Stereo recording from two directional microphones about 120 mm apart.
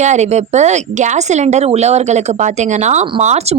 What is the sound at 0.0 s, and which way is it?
Speech, 75° right (ahead or behind).